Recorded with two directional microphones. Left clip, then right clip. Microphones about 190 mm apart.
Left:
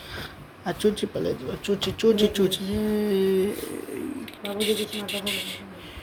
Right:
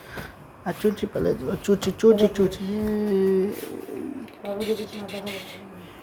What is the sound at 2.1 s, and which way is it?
Speech, 5° right (ahead or behind).